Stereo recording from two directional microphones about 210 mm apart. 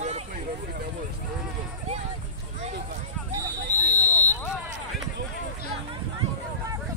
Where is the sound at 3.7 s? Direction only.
35° left (ahead or behind).